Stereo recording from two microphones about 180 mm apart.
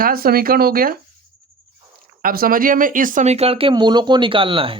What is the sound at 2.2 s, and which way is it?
Speech, 55° right (ahead or behind).